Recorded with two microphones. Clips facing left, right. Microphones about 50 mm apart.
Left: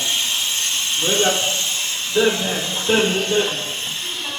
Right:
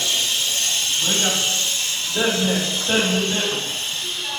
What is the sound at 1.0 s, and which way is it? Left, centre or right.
Speech, left.